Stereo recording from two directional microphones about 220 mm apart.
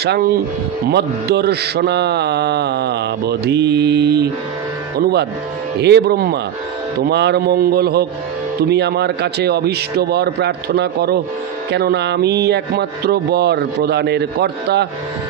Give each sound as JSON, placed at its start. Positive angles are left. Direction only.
{"t": 0.0, "sound": "mantra", "side_deg": -50}
{"t": 5.8, "sound": "mantra", "side_deg": -50}